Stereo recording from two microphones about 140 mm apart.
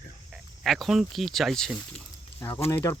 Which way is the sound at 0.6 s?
Centre (ahead or behind).